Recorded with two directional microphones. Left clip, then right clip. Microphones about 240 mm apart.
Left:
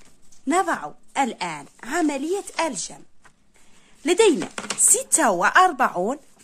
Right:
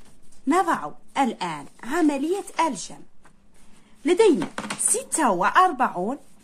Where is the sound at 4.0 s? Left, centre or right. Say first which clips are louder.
Even; left.